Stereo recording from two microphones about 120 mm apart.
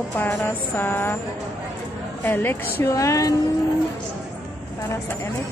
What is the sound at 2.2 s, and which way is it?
Speech, 15° left (ahead or behind).